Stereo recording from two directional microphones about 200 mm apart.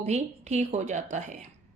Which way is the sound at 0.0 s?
35° right (ahead or behind).